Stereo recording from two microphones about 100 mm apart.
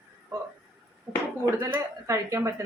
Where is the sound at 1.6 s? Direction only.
30° right (ahead or behind).